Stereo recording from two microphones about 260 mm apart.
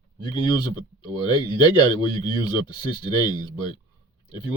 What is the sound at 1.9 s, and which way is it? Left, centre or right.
A man's voice, centre.